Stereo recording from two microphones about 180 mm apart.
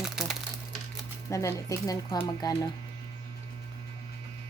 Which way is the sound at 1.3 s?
15° left (ahead or behind).